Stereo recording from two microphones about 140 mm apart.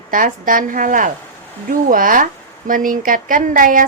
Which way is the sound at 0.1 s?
75° right (ahead or behind).